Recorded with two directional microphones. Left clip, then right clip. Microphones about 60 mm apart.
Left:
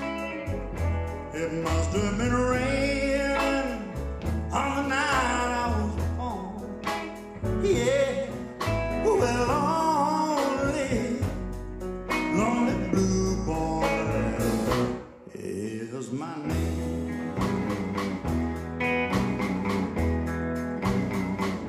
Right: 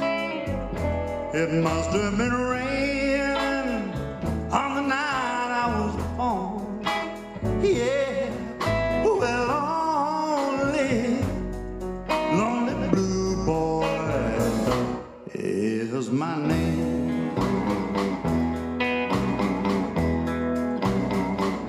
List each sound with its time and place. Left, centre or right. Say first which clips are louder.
1.3 s music: right 5 dB; right
7.6 s music: right 1 dB; right
12.3 s music: right 1 dB; right
15.5 s music: right 8 dB; right
20.2 s music: right 5 dB; right